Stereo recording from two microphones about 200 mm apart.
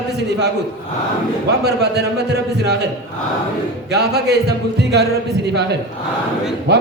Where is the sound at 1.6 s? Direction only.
55° right (ahead or behind).